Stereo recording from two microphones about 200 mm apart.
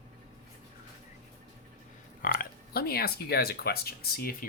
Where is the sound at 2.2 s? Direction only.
45° left (ahead or behind).